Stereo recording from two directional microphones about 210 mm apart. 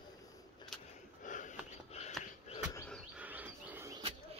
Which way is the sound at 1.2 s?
35° left (ahead or behind).